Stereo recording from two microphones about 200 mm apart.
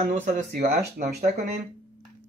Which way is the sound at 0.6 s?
50° right (ahead or behind).